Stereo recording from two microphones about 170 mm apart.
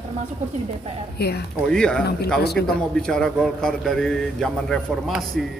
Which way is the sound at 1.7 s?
5° left (ahead or behind).